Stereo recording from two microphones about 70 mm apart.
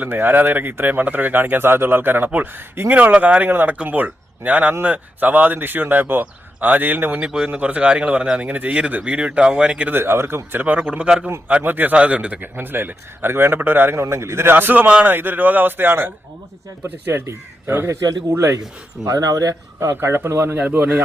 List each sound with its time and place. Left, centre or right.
0.0 s speech: right
2.9 s speech: right
7.2 s speech: centre
9.9 s speech: right
14.0 s speech: right
19.0 s speech: right
19.8 s speech: right
20.6 s speech: right